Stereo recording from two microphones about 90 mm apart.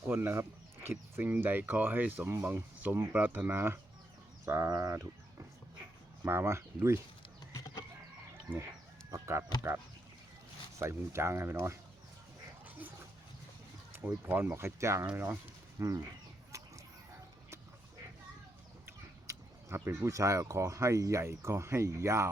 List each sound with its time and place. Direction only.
0.1 s speech: 25° right (ahead or behind)
6.2 s speech: 25° right (ahead or behind)
9.0 s speech: 35° right (ahead or behind)
10.8 s speech: 30° right (ahead or behind)
14.3 s speech: 25° right (ahead or behind)
15.8 s speech: 40° right (ahead or behind)
16.5 s chicken: 35° right (ahead or behind)
18.9 s speech: 25° right (ahead or behind)